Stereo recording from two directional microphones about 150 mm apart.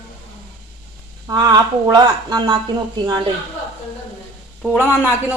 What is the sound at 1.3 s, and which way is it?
Speech, 30° right (ahead or behind).